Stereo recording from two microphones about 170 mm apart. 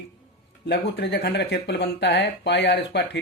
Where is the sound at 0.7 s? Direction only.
85° left.